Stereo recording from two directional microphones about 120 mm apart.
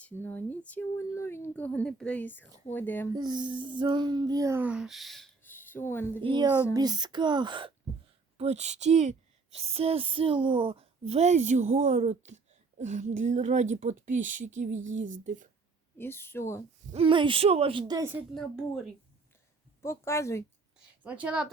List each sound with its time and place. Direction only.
0.0 s speech: 15° left (ahead or behind)
3.2 s a child's voice: 40° right (ahead or behind)
4.6 s speech: 5° right (ahead or behind)
5.4 s a sound: 15° left (ahead or behind)
6.2 s a child's voice: 40° right (ahead or behind)
8.4 s a woman's voice: 65° right (ahead or behind); by 15.4 s 90° right
16.0 s speech: 20° left (ahead or behind)
16.9 s speech: 50° right (ahead or behind)
18.0 s a woman's voice: 15° right (ahead or behind)
19.8 s speech: 25° left (ahead or behind)
21.0 s a woman's voice: 10° right (ahead or behind)